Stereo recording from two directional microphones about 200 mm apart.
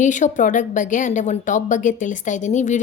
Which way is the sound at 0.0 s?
40° left (ahead or behind).